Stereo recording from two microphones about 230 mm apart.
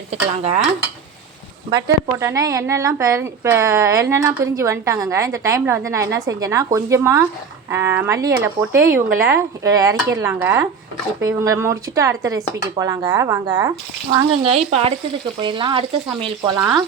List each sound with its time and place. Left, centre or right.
0.1 s speech: right
1.7 s a woman's voice: centre